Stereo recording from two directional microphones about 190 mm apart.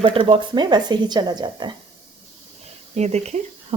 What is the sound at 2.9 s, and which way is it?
Speech, 35° right (ahead or behind).